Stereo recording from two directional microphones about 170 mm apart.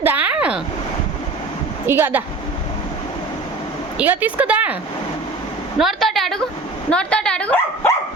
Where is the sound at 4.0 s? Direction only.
10° right (ahead or behind).